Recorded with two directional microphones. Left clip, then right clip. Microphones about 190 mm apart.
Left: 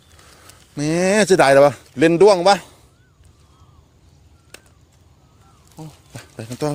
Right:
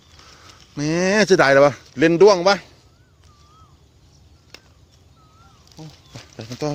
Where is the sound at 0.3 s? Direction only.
15° left (ahead or behind).